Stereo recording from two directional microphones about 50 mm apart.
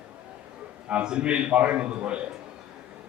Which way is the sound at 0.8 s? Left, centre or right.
Right.